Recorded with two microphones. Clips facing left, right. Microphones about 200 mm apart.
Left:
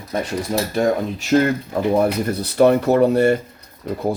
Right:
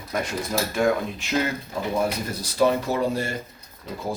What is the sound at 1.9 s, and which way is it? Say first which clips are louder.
Speech: left 8 dB; 60° left (ahead or behind).